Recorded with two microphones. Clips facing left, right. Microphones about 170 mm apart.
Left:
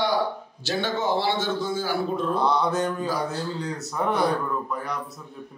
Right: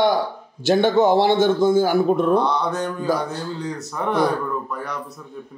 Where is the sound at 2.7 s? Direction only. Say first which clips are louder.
Right 3 dB; centre (ahead or behind).